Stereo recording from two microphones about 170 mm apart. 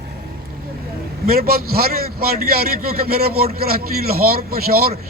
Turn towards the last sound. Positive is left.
turn(degrees=-65)  # may be behind; listen again after turning